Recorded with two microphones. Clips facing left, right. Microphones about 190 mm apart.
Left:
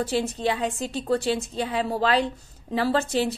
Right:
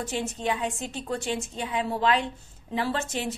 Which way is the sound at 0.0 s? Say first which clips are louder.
Left 5 dB; 35° left (ahead or behind).